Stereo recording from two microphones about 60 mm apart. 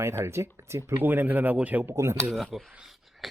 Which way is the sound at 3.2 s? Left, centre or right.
Centre.